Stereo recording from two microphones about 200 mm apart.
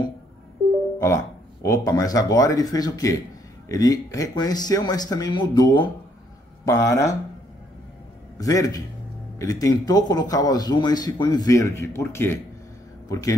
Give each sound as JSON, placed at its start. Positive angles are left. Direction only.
{"t": 0.9, "sound": "a man's voice", "side_deg": 15}
{"t": 8.4, "sound": "speech", "side_deg": 15}